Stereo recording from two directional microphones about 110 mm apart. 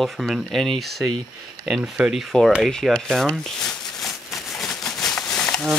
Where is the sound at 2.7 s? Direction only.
5° left (ahead or behind).